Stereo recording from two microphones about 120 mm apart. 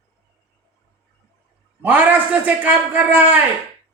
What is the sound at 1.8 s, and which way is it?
A man's voice, 15° right (ahead or behind).